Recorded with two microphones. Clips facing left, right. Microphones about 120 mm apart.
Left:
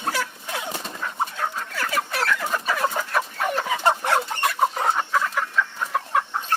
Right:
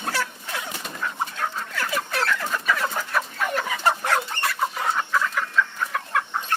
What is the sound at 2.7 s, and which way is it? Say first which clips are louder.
Chicken: left 4 dB; 15° left (ahead or behind).